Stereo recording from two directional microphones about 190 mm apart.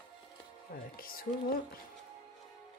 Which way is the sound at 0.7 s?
50° left (ahead or behind).